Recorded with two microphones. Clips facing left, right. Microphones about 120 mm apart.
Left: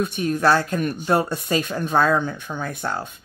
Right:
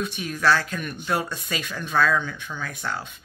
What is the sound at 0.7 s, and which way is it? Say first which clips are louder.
Speech: left 6 dB; 40° left (ahead or behind).